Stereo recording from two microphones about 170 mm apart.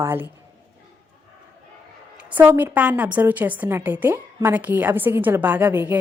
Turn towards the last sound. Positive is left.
turn(degrees=-10)  # may be behind; listen again after turning